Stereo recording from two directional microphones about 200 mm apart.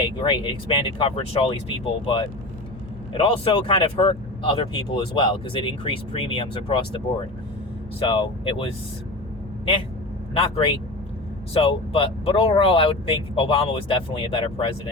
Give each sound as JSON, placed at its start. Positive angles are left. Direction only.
{"t": 0.0, "sound": "speech", "side_deg": 25}
{"t": 10.3, "sound": "speech", "side_deg": 30}